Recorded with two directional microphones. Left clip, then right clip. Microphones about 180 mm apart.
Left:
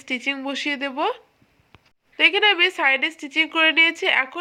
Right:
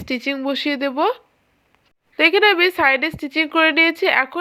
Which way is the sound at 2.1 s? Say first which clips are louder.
Right 3 dB; 35° right (ahead or behind).